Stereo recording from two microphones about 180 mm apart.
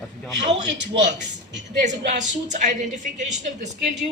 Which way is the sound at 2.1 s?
40° right (ahead or behind).